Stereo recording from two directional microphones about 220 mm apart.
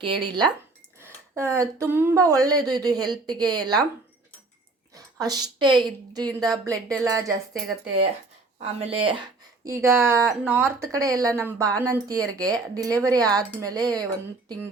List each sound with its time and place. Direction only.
0.0 s speech: 20° right (ahead or behind)
1.0 s a sound: 10° right (ahead or behind)
1.8 s speech: 10° right (ahead or behind)
4.9 s a sound: 15° right (ahead or behind)
5.5 s speech: 20° right (ahead or behind)
8.5 s speech: 25° right (ahead or behind)
9.6 s speech: 15° right (ahead or behind)